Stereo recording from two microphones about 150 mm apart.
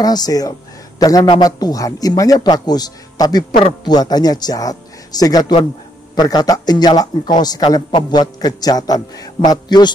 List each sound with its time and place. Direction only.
0.0 s a man's voice: 25° left (ahead or behind)